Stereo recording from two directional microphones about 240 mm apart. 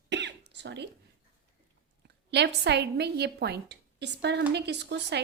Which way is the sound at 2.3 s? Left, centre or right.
Right.